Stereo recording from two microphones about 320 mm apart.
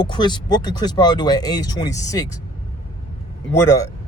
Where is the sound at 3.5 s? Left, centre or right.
Centre.